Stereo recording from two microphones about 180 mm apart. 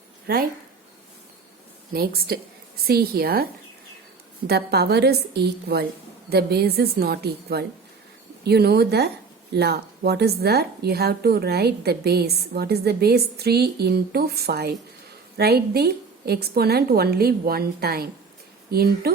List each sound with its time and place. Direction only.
1.9 s a woman's voice: 55° right (ahead or behind)